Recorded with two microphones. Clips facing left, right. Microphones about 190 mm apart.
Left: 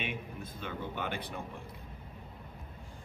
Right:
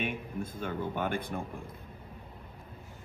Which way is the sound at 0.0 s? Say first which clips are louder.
Right 5 dB; 50° right (ahead or behind).